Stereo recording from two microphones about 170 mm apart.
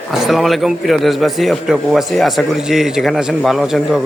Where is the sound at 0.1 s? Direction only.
Centre (ahead or behind).